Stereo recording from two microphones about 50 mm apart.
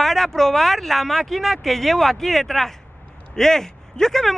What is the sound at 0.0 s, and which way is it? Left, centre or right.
Speech, centre.